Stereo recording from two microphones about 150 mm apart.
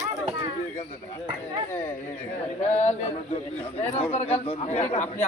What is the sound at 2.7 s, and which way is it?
Speech, 45° left (ahead or behind).